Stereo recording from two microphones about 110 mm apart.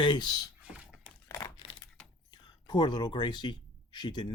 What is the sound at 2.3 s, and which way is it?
Speech, 40° left (ahead or behind).